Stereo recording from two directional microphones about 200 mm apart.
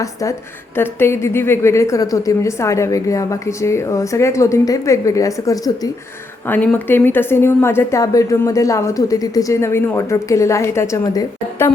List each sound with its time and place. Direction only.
0.0 s a woman's voice: 15° left (ahead or behind)